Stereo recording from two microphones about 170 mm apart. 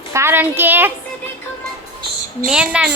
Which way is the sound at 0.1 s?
15° right (ahead or behind).